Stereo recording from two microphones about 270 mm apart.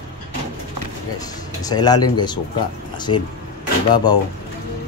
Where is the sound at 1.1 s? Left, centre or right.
Centre.